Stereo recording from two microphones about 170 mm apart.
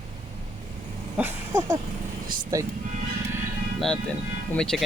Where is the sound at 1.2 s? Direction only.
15° right (ahead or behind).